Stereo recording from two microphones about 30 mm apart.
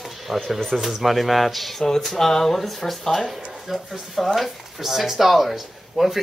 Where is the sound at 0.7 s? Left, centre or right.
Centre.